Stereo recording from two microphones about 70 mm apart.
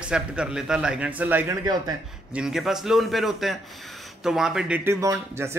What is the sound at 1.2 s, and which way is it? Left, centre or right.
Speech, right.